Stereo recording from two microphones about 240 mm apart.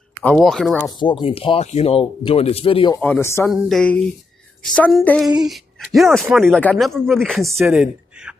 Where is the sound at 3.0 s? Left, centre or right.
Centre.